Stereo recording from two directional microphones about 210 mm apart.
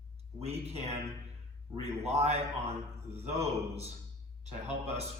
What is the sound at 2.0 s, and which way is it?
Speech, 30° right (ahead or behind).